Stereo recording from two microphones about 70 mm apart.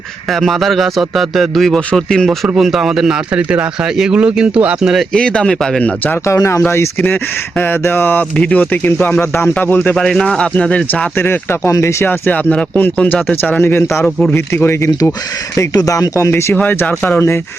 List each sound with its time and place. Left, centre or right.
0.3 s a man's voice: centre
4.8 s a man's voice: centre
5.1 s speech: centre
6.2 s speech: left
7.6 s speech: left
9.9 s speech: centre
11.2 s speech: left
11.7 s speech: left
12.0 s speech: left
15.5 s speech: left
16.6 s speech: centre